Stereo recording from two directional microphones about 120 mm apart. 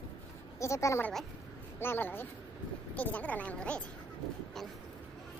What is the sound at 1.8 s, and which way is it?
Speech, 20° left (ahead or behind).